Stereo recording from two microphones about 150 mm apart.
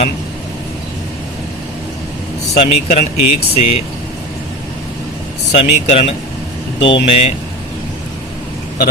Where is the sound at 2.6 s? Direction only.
50° left (ahead or behind).